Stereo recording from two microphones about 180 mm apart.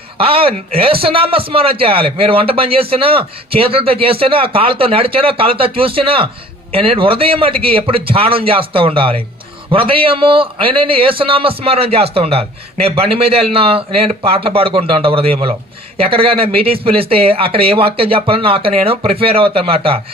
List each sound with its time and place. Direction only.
0.2 s a man's voice: 30° right (ahead or behind)